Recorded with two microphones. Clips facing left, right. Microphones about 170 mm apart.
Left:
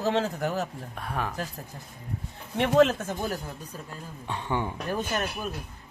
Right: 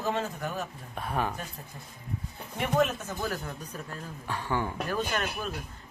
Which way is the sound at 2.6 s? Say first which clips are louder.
Left 6 dB; 80° left.